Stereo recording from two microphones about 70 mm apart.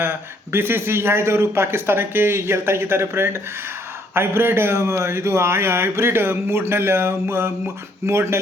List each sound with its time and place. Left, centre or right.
0.0 s speech: right